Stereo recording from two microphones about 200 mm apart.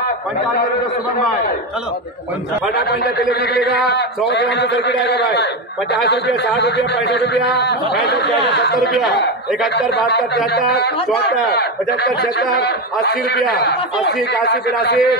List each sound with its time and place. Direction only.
2.7 s a man's voice: 55° left (ahead or behind)
10.4 s speech: centre (ahead or behind)
14.0 s a man's voice: 60° left (ahead or behind)